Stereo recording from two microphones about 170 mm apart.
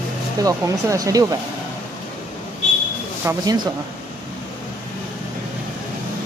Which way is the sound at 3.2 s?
15° right (ahead or behind).